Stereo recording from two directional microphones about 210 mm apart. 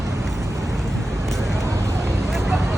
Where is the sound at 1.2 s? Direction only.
Centre (ahead or behind).